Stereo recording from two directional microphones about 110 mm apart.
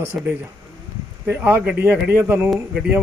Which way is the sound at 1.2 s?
20° right (ahead or behind).